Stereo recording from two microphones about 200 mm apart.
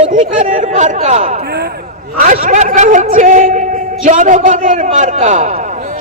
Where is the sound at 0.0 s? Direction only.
40° right (ahead or behind).